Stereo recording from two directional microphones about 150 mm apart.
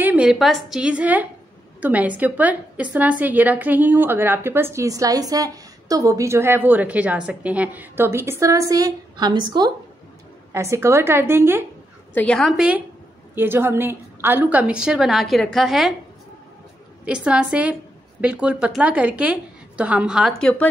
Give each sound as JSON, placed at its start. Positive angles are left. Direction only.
{"t": 0.0, "sound": "a woman's voice", "side_deg": -10}
{"t": 10.5, "sound": "a woman's voice", "side_deg": -20}
{"t": 12.1, "sound": "a woman's voice", "side_deg": 10}
{"t": 17.0, "sound": "a woman's voice", "side_deg": -5}